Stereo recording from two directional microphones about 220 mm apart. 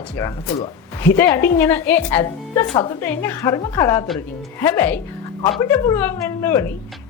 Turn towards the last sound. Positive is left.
turn(degrees=10)  # may be behind; listen again after turning